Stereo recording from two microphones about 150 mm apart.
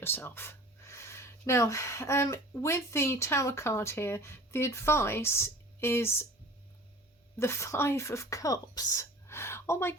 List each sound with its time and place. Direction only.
0.0 s speech: 15° left (ahead or behind)
7.3 s speech: 20° left (ahead or behind)